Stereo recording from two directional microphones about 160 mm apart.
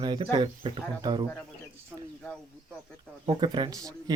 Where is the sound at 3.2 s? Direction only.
25° right (ahead or behind).